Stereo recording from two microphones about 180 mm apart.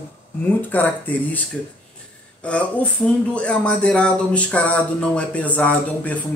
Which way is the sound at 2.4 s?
5° left (ahead or behind).